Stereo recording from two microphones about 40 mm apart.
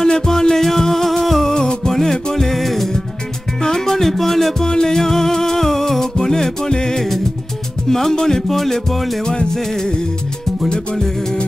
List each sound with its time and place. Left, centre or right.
0.0 s music: centre
1.4 s music: centre
1.9 s music: centre
9.2 s music: centre